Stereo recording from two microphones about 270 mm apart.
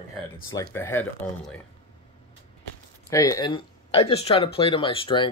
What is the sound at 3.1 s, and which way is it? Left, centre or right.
Speech, centre.